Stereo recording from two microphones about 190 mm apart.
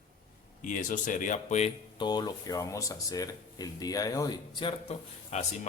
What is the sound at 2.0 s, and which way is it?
Speech, 20° left (ahead or behind).